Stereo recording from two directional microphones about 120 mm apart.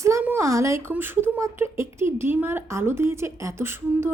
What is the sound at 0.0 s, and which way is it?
A woman's voice, 20° right (ahead or behind).